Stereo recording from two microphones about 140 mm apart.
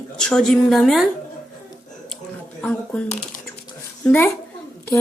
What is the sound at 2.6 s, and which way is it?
Speech, 10° left (ahead or behind).